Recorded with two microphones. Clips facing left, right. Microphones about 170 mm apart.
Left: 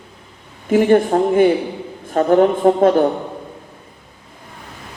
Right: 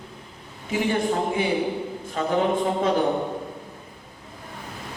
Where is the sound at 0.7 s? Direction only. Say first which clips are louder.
Left 10 dB; 50° left (ahead or behind).